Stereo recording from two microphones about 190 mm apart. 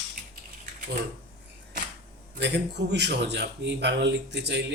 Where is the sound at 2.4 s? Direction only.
65° right (ahead or behind).